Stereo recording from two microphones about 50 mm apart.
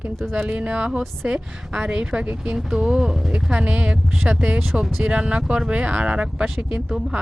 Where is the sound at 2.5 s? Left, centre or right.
Centre.